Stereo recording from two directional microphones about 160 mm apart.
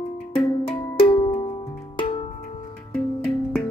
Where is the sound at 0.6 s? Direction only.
35° left (ahead or behind).